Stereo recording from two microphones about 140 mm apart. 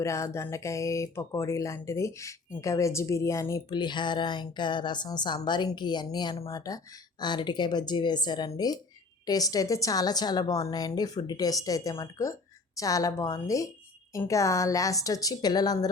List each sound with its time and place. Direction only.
0.0 s a woman's voice: 20° left (ahead or behind)